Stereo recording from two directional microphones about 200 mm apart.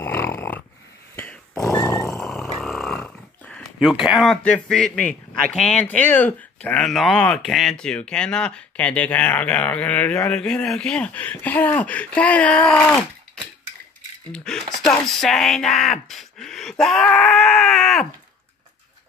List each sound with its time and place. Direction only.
0.0 s dog: 10° left (ahead or behind)
1.1 s a sound: 5° left (ahead or behind)
1.8 s grunt: 15° left (ahead or behind)
2.0 s speech: centre (ahead or behind)
14.3 s speech: 5° left (ahead or behind)